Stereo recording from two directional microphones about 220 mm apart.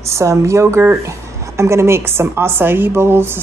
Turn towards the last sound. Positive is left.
turn(degrees=-10)  # may be behind; listen again after turning